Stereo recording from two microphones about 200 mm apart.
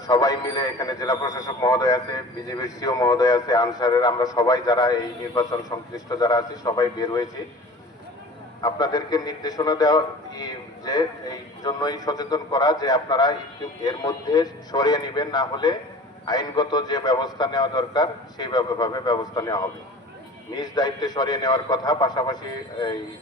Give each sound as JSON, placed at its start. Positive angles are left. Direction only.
{"t": 0.1, "sound": "a man's voice", "side_deg": 20}
{"t": 8.6, "sound": "a man's voice", "side_deg": 20}